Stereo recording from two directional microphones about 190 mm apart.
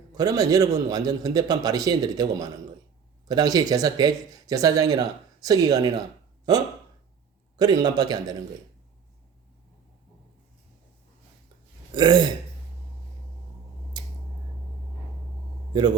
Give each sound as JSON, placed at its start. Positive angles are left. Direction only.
{"t": 0.1, "sound": "speech", "side_deg": -20}
{"t": 7.5, "sound": "speech", "side_deg": -20}
{"t": 11.9, "sound": "speech", "side_deg": -25}
{"t": 14.0, "sound": "a sound", "side_deg": -25}